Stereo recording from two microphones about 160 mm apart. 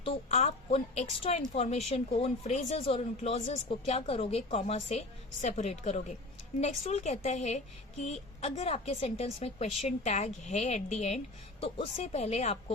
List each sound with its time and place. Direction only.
0.0 s a woman's voice: 40° left (ahead or behind)